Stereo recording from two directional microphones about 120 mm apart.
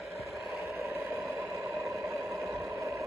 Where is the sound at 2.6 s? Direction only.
20° right (ahead or behind).